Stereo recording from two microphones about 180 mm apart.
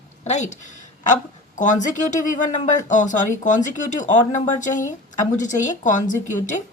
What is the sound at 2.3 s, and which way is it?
Speech, 45° left (ahead or behind).